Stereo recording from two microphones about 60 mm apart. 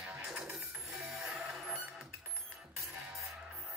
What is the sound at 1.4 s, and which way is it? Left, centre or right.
Music, centre.